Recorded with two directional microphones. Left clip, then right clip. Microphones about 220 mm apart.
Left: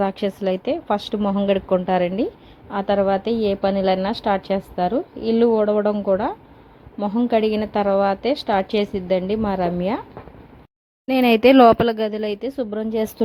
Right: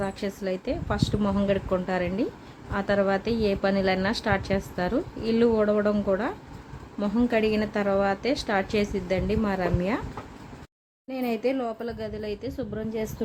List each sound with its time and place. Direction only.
0.0 s a woman's voice: 25° left (ahead or behind)
11.1 s speech: 40° left (ahead or behind)